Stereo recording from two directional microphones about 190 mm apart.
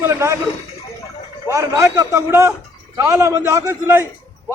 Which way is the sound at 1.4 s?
15° right (ahead or behind).